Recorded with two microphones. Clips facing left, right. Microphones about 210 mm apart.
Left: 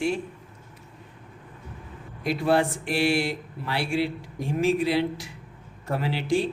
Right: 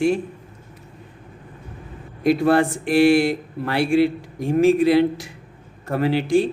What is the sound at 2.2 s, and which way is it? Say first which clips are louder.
Speech: right 6 dB; 50° right (ahead or behind).